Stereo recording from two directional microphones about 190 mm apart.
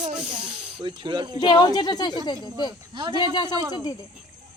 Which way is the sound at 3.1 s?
20° left (ahead or behind).